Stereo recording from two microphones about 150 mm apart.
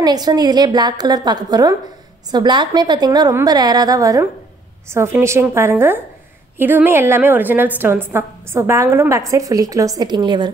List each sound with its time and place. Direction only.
0.0 s a woman's voice: 25° right (ahead or behind)